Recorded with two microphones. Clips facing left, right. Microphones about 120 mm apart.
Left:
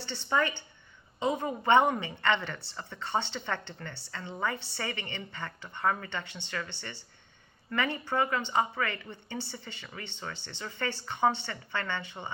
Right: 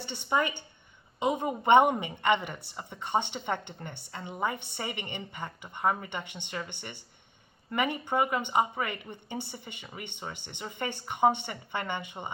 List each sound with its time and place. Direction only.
0.0 s a woman's voice: 15° right (ahead or behind)